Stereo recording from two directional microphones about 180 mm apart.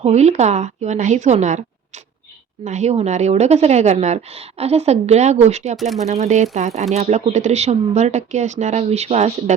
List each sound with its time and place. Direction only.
0.0 s a woman's voice: 35° right (ahead or behind)
2.6 s a woman's voice: 40° right (ahead or behind)